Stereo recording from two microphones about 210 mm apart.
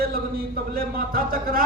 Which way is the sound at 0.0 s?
45° right (ahead or behind).